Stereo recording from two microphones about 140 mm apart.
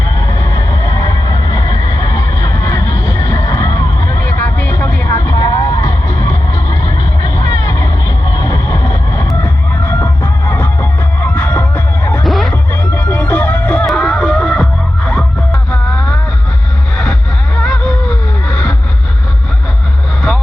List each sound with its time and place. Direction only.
0.3 s a sound: 25° left (ahead or behind)
5.1 s music: 25° left (ahead or behind)
12.2 s music: centre (ahead or behind)
12.9 s music: 15° left (ahead or behind)
15.7 s a sound: 5° left (ahead or behind)
17.6 s music: 5° left (ahead or behind)